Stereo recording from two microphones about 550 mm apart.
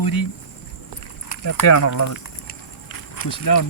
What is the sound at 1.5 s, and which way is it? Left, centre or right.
Speech, left.